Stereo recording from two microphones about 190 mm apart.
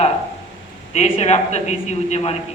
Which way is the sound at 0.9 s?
30° left (ahead or behind).